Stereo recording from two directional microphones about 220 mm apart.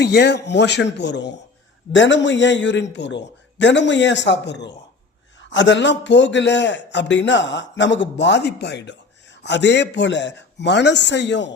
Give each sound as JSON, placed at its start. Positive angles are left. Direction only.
{"t": 0.0, "sound": "a man's voice", "side_deg": 50}